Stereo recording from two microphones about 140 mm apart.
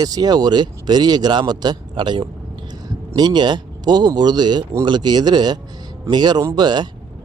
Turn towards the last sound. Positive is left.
turn(degrees=-30)  # may be behind; listen again after turning